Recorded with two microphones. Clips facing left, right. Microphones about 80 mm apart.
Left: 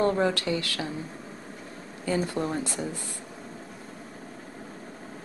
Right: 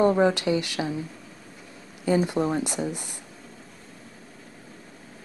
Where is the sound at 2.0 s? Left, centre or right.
Centre.